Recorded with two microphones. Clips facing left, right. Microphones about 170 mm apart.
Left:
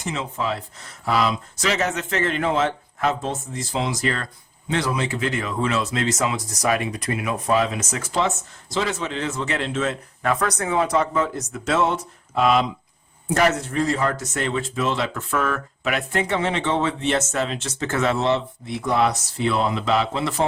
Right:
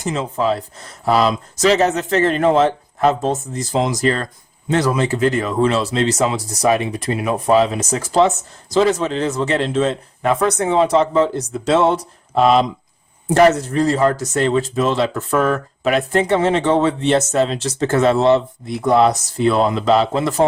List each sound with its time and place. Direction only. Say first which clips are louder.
0.0 s speech: right 7 dB; 40° right (ahead or behind)